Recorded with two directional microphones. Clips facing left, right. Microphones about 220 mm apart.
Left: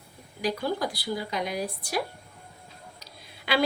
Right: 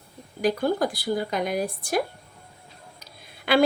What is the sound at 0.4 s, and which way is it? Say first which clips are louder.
A woman's voice: right 5 dB; 50° right (ahead or behind).